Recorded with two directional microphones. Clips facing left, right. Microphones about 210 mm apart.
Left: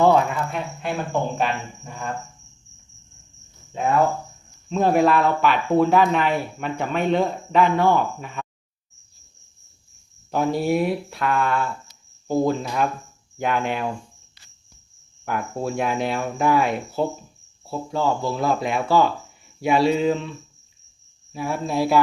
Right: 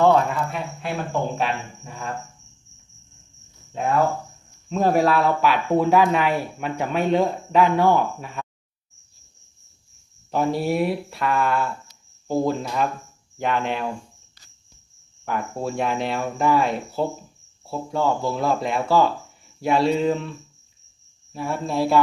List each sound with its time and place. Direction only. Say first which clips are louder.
0.0 s speech: even; centre (ahead or behind)
1.4 s cricket: left 1 dB; centre (ahead or behind)
3.7 s cricket: left 1 dB; centre (ahead or behind)
4.7 s speech: left 1 dB; 5° right (ahead or behind)
10.3 s cricket: left 1 dB; centre (ahead or behind)
15.2 s cricket: even; centre (ahead or behind)
21.3 s cricket: left 1 dB; 5° left (ahead or behind)